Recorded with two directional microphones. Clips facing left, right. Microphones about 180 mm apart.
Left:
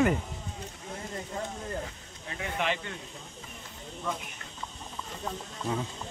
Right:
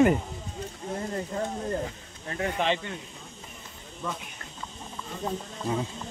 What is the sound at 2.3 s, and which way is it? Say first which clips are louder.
Speech: right 5 dB; 45° right (ahead or behind).